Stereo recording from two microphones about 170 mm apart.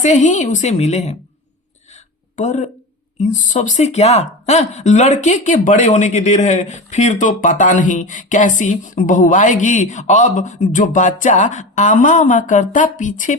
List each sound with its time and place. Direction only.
0.0 s speech: 45° left (ahead or behind)
2.3 s speech: 45° left (ahead or behind)